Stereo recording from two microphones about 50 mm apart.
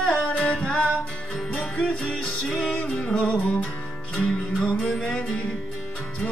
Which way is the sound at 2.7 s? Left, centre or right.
Left.